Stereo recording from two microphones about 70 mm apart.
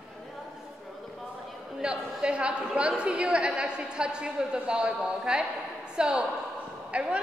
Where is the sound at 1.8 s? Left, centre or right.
Centre.